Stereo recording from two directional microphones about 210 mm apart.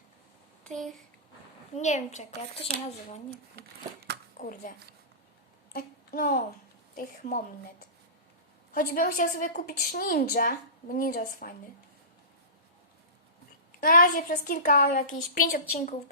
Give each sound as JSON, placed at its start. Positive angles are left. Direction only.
{"t": 0.6, "sound": "speech", "side_deg": 0}
{"t": 1.7, "sound": "a woman's voice", "side_deg": 35}
{"t": 4.4, "sound": "a woman's voice", "side_deg": 40}
{"t": 8.7, "sound": "a woman's voice", "side_deg": 40}
{"t": 13.8, "sound": "a woman's voice", "side_deg": 40}